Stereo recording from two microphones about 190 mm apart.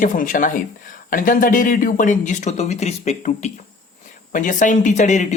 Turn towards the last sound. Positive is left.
turn(degrees=40)  # may be behind; listen again after turning